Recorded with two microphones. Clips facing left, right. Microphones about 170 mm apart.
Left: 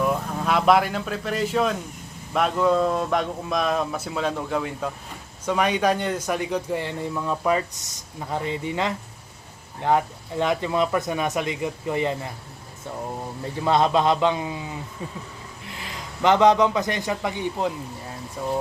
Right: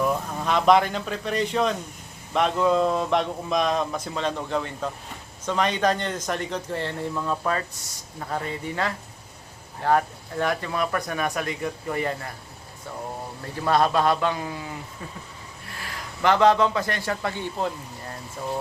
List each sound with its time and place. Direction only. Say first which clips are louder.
0.0 s a man's voice: left 1 dB; 5° left (ahead or behind); by 12.3 s 20° left (ahead or behind)
13.7 s speech: left 1 dB; 20° left (ahead or behind)
15.7 s speech: even; 20° left (ahead or behind)